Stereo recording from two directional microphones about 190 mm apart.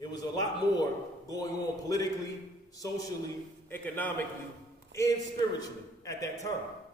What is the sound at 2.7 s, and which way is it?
A man's voice, 20° left (ahead or behind).